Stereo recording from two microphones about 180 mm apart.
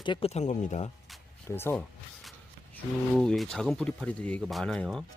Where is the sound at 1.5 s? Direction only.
10° left (ahead or behind).